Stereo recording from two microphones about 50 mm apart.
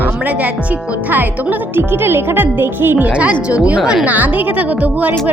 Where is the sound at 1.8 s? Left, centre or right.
Right.